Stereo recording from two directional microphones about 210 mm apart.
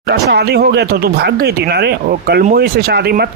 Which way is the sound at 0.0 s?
50° right (ahead or behind).